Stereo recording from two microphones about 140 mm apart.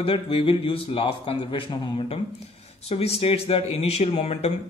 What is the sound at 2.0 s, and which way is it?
Speech, 50° left (ahead or behind).